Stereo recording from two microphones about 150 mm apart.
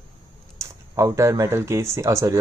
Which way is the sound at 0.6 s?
20° right (ahead or behind).